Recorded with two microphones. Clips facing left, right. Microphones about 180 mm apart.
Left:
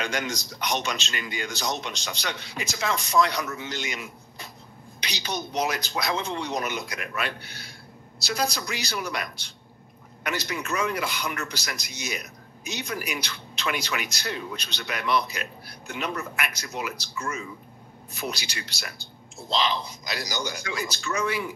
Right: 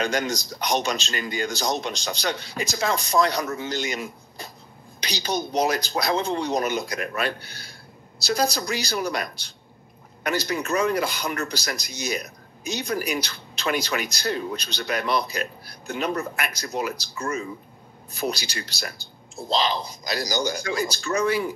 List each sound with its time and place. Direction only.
0.0 s speech: 35° right (ahead or behind)